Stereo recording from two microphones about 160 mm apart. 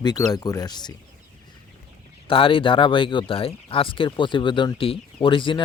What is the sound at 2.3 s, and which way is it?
Speech, 35° left (ahead or behind).